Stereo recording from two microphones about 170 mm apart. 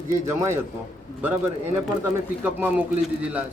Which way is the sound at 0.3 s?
15° right (ahead or behind).